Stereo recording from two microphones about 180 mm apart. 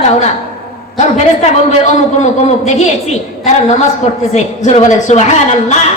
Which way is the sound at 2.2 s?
40° left (ahead or behind).